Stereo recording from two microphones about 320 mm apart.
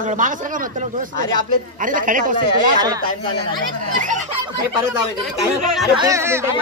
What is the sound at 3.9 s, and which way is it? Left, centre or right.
Speech, right.